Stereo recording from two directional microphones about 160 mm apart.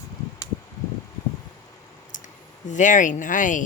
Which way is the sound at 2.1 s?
50° left (ahead or behind).